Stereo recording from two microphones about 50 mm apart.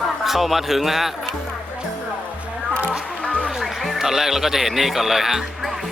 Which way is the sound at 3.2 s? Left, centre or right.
Centre.